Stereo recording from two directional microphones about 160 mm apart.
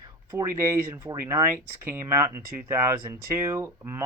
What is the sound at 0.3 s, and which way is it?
Speech, 15° right (ahead or behind).